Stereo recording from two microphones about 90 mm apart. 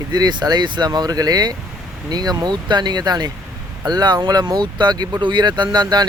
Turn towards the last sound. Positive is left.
turn(degrees=-50)  # may be behind; listen again after turning